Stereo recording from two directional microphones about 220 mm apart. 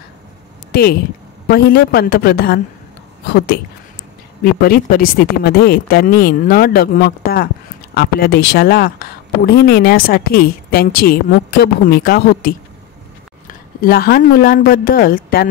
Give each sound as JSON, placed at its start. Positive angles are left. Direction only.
{"t": 0.7, "sound": "a sound", "side_deg": 45}
{"t": 1.5, "sound": "speech", "side_deg": 45}
{"t": 13.7, "sound": "speech", "side_deg": 40}